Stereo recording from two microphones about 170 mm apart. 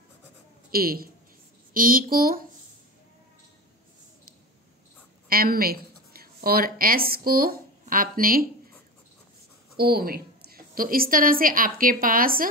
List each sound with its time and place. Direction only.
0.7 s a man's voice: 60° right (ahead or behind)
5.3 s speech: 60° right (ahead or behind)
9.8 s a woman's voice: 65° right (ahead or behind)